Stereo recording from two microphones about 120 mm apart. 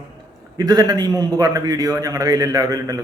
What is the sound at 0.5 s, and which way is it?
A man's voice, 35° right (ahead or behind).